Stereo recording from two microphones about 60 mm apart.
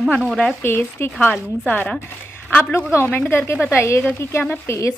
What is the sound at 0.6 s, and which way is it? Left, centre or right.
A woman's voice, left.